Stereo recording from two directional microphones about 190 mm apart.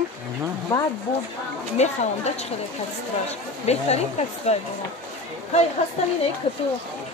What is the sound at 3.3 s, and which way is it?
Speech, 35° left (ahead or behind).